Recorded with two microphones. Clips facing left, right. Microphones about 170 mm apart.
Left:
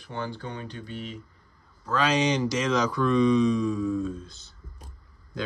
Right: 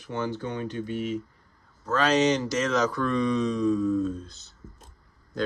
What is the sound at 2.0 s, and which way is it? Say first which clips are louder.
Speech: right 2 dB; 10° left (ahead or behind).